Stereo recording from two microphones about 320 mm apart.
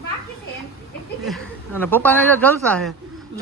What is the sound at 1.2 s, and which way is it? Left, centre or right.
A man's voice, centre.